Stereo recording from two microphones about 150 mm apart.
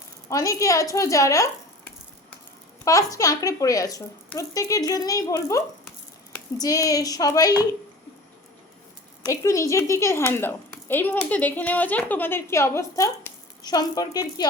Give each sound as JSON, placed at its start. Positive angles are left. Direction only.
{"t": 0.3, "sound": "speech", "side_deg": 20}
{"t": 2.8, "sound": "speech", "side_deg": 20}
{"t": 9.3, "sound": "speech", "side_deg": 20}